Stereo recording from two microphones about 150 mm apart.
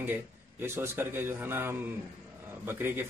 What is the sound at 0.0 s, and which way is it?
A man's voice, 15° right (ahead or behind).